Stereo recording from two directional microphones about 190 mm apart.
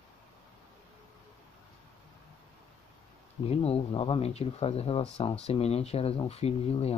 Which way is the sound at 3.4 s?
30° left (ahead or behind).